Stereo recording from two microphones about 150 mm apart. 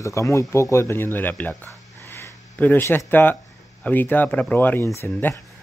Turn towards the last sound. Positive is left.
turn(degrees=15)  # may be behind; listen again after turning